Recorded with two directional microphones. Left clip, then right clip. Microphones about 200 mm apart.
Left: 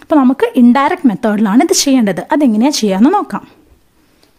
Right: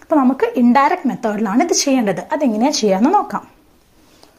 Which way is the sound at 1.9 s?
35° left (ahead or behind).